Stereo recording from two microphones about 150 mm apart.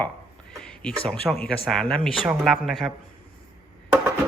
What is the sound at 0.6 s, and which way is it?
Speech, 5° left (ahead or behind).